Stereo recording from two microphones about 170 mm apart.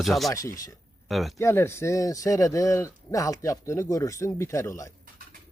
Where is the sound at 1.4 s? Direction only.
15° left (ahead or behind).